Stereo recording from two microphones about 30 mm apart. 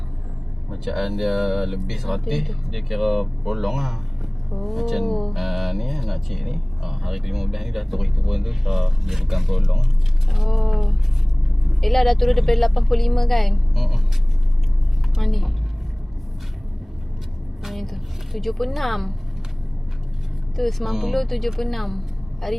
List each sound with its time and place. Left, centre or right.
0.7 s speech: centre
5.0 s music: centre
5.3 s a woman's voice: centre
13.7 s speech: centre
15.2 s speech: centre
17.7 s music: centre
20.6 s a woman's voice: centre